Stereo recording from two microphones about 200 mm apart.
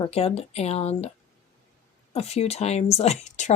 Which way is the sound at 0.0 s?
30° left (ahead or behind).